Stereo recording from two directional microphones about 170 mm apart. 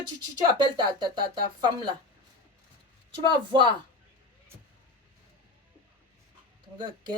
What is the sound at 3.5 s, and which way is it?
Speech, 30° right (ahead or behind).